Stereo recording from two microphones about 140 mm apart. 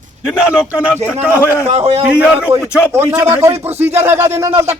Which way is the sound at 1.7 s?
45° right (ahead or behind).